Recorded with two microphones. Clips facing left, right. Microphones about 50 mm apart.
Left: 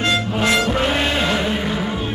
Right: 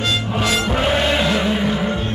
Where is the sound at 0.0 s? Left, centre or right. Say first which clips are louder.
Left 2 dB; left.